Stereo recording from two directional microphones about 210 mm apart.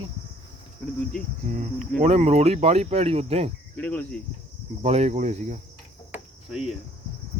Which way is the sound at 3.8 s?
10° left (ahead or behind).